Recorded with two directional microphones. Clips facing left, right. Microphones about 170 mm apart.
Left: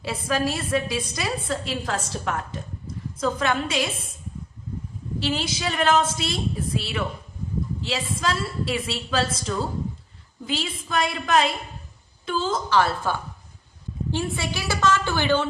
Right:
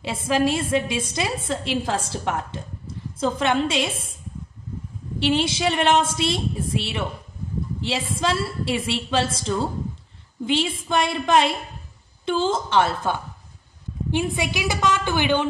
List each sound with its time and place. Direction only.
0.3 s a woman's voice: 25° right (ahead or behind)
5.2 s a woman's voice: 25° right (ahead or behind)